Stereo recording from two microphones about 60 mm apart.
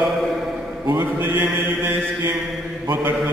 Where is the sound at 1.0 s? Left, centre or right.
Right.